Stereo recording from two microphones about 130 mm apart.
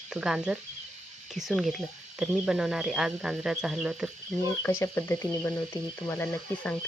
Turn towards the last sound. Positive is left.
turn(degrees=15)  # may be behind; listen again after turning